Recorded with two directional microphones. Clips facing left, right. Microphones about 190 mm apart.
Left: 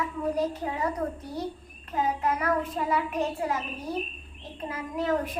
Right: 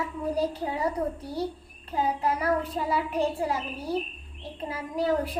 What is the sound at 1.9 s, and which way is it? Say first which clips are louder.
A child's voice: even; 30° right (ahead or behind).